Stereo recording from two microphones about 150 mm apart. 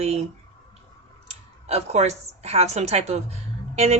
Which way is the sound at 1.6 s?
45° right (ahead or behind).